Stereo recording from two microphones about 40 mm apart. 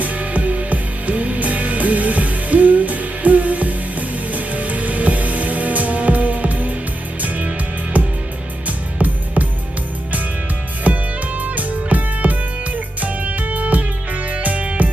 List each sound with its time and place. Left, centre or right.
0.0 s music: right
10.9 s music: right